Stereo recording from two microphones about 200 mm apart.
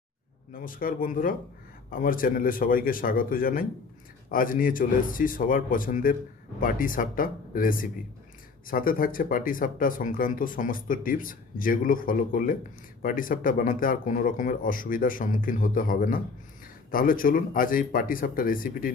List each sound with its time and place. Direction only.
0.5 s speech: 45° left (ahead or behind)